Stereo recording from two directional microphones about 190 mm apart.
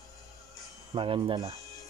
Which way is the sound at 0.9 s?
25° right (ahead or behind).